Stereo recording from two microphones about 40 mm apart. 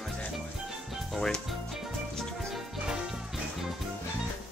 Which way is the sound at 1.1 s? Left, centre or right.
Centre.